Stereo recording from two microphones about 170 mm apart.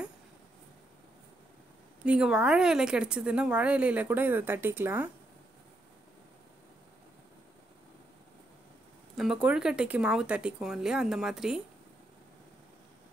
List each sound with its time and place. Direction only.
2.0 s speech: 5° right (ahead or behind)
9.1 s speech: centre (ahead or behind)